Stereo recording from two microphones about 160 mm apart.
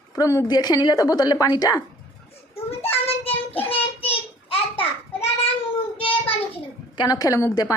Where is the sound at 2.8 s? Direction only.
40° left (ahead or behind).